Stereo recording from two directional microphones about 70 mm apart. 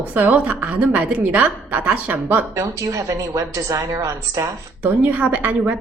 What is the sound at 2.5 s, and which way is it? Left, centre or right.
A woman's voice, right.